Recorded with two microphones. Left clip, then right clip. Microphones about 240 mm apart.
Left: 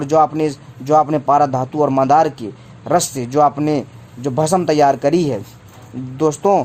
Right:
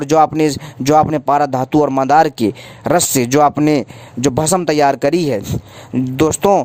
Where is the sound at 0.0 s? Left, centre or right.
Right.